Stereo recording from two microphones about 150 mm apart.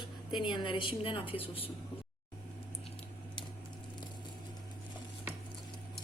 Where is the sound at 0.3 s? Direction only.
30° left (ahead or behind).